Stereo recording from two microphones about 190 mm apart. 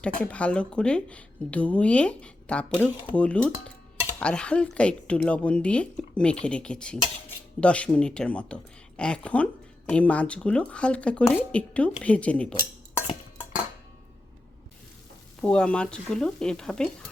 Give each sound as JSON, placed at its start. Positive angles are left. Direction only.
{"t": 0.0, "sound": "a woman's voice", "side_deg": 5}
{"t": 15.4, "sound": "a woman's voice", "side_deg": 5}